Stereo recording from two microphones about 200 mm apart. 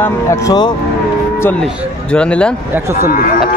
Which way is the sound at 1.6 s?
5° left (ahead or behind).